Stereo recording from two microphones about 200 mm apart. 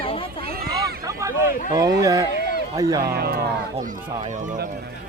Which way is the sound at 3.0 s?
50° right (ahead or behind).